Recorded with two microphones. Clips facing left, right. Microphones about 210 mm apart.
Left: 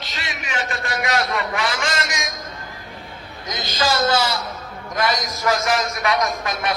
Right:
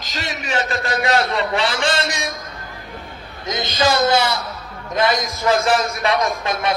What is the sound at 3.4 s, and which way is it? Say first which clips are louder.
A man's voice: right 4 dB; 25° right (ahead or behind).